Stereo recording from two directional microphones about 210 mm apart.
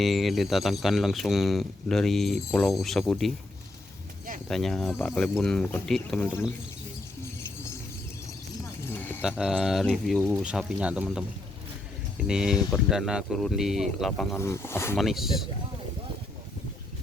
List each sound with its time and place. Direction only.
0.0 s speech: centre (ahead or behind)
4.4 s speech: centre (ahead or behind)
8.8 s a sound: 10° left (ahead or behind)
9.4 s speech: centre (ahead or behind)
12.3 s speech: centre (ahead or behind)
14.3 s speech: 10° left (ahead or behind)
14.9 s speech: centre (ahead or behind)